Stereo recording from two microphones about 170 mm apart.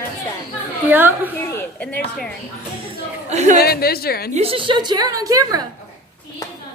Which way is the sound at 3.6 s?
65° left (ahead or behind).